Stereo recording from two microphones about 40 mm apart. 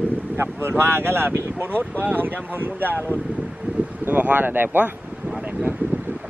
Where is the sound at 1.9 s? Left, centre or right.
Right.